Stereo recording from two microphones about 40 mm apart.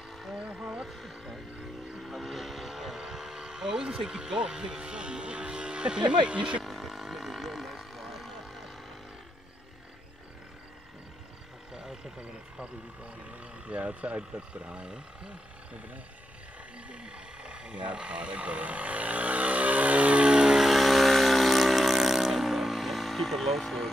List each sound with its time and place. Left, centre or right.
0.6 s vehicle: centre
0.8 s music: centre
2.0 s vehicle: centre; by 6.6 s right
6.6 s roaring cats: centre
11.7 s vehicle: centre
13.7 s speech: right
16.9 s speech: right
20.2 s vehicle: right
20.5 s vehicle: centre